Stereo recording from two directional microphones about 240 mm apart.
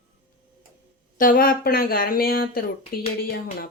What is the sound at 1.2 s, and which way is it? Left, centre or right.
A woman's voice, left.